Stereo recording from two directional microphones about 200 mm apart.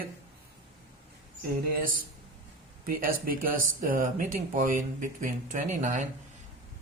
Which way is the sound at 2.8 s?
45° right (ahead or behind).